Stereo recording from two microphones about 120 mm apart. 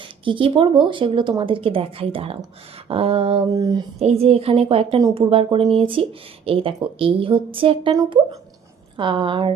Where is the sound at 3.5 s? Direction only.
35° right (ahead or behind).